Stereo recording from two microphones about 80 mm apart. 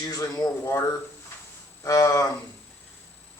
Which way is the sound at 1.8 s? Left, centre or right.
Left.